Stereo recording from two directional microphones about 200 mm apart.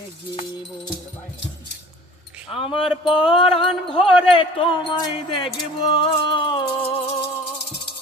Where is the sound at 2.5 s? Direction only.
25° left (ahead or behind).